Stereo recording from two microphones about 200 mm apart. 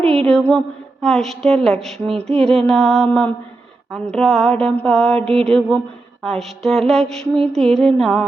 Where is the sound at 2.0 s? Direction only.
30° right (ahead or behind).